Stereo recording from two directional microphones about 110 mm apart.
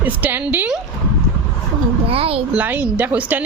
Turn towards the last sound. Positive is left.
turn(degrees=-15)  # may be behind; listen again after turning